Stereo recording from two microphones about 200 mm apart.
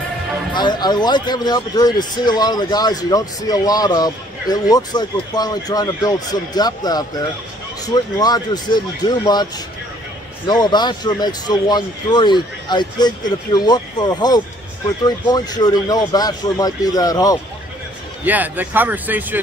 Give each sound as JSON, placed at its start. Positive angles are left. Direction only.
{"t": 0.5, "sound": "speech", "side_deg": 20}
{"t": 18.2, "sound": "speech", "side_deg": -10}